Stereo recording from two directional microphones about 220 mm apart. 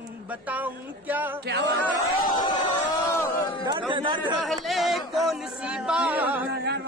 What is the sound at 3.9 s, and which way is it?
Speech, 20° right (ahead or behind).